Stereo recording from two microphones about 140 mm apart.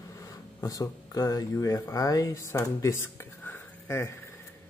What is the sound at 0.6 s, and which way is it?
Speech, 25° left (ahead or behind).